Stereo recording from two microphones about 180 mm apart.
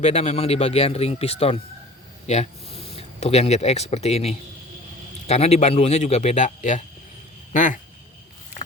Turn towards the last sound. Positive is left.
turn(degrees=45)  # may be behind; listen again after turning